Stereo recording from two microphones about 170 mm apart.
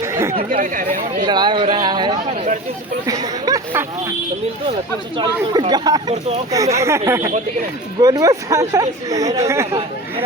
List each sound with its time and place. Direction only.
0.0 s chatter: 15° right (ahead or behind)
0.3 s speech: 55° right (ahead or behind)
1.2 s speech: 25° right (ahead or behind)
5.1 s speech: 25° right (ahead or behind)